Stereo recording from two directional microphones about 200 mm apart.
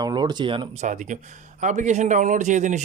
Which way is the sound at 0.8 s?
40° right (ahead or behind).